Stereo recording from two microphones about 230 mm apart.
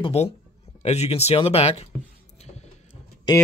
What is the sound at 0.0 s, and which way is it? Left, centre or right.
Speech, left.